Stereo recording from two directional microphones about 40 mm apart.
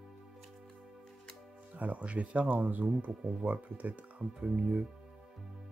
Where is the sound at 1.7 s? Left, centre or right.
Right.